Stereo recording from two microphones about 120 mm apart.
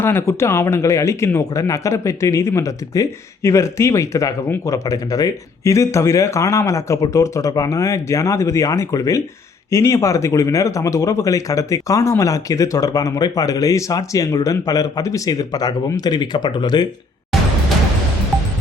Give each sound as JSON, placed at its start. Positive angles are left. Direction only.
{"t": 0.0, "sound": "speech", "side_deg": 20}